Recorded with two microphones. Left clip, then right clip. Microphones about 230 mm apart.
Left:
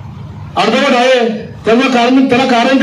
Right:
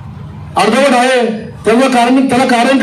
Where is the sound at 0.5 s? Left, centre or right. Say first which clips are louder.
Right 1 dB; right.